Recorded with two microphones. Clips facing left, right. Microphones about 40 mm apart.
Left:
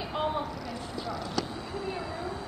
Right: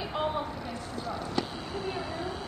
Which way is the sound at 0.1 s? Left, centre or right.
Centre.